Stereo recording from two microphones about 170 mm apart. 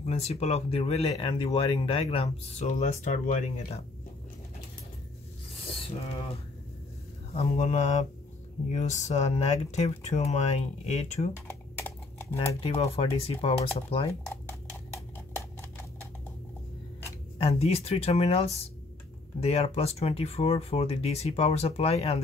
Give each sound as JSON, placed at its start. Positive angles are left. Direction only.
{"t": 0.0, "sound": "speech", "side_deg": 40}
{"t": 2.6, "sound": "speech", "side_deg": 45}
{"t": 7.3, "sound": "speech", "side_deg": 45}
{"t": 11.4, "sound": "typing", "side_deg": 15}
{"t": 12.5, "sound": "speech", "side_deg": 35}
{"t": 14.2, "sound": "a sound", "side_deg": 15}
{"t": 17.4, "sound": "speech", "side_deg": 35}